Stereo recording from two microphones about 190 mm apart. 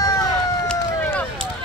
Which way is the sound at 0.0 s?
20° left (ahead or behind).